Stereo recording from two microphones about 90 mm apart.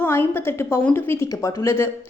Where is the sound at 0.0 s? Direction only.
25° left (ahead or behind).